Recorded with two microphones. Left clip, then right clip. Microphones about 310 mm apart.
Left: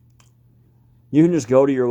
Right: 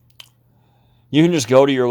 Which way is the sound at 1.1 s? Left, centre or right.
Right.